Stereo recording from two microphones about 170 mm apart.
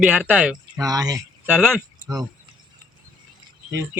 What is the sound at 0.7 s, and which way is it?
Speech, 20° right (ahead or behind).